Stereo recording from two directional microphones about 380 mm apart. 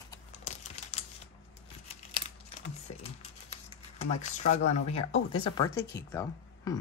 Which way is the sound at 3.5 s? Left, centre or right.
Centre.